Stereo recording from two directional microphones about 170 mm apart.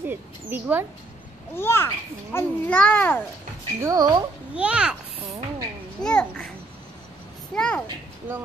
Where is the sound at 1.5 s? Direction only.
15° left (ahead or behind).